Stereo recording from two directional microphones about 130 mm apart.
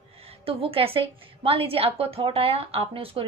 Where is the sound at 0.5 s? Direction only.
45° right (ahead or behind).